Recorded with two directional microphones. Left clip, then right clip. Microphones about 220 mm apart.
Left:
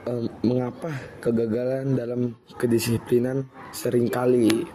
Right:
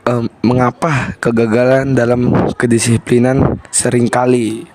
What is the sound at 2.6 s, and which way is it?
Speech, 40° right (ahead or behind).